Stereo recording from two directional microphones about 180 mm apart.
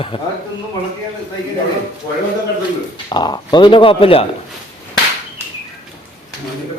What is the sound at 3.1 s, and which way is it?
Speech, 25° left (ahead or behind).